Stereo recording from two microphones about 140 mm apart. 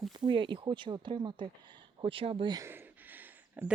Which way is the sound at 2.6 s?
15° right (ahead or behind).